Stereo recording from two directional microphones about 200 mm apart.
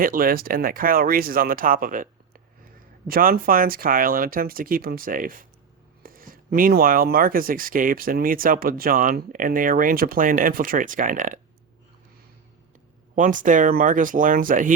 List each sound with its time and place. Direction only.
0.0 s speech: 45° right (ahead or behind)
13.1 s speech: 40° right (ahead or behind)